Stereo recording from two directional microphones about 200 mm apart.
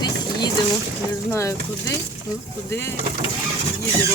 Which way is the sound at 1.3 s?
15° left (ahead or behind).